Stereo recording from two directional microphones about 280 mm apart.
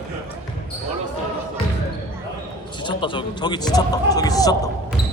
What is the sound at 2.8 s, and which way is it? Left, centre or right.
Speech, centre.